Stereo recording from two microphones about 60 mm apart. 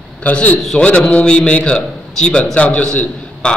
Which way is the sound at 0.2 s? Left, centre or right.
Left.